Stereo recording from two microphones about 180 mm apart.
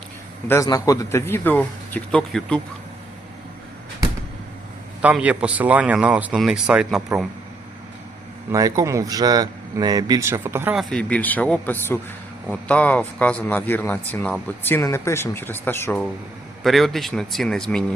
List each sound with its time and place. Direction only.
0.4 s speech: 15° left (ahead or behind)
5.0 s speech: 10° right (ahead or behind)
8.5 s speech: 20° right (ahead or behind)
10.8 s speech: 5° left (ahead or behind)
16.6 s speech: centre (ahead or behind)